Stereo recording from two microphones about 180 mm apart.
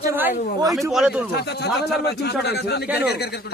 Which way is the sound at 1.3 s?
65° left (ahead or behind).